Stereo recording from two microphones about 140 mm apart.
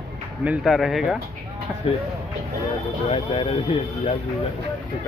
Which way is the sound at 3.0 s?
40° left (ahead or behind).